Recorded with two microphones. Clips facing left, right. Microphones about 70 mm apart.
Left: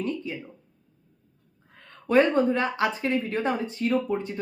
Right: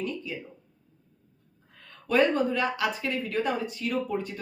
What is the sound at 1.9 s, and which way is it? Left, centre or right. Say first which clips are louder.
Speech: left 3 dB; left.